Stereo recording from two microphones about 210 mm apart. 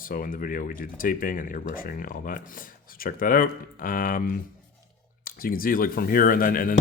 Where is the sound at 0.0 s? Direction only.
40° left (ahead or behind).